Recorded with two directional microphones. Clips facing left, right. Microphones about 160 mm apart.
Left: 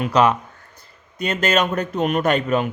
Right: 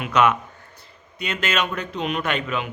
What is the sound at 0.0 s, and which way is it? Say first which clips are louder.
A man's voice: left 2 dB; 35° left (ahead or behind).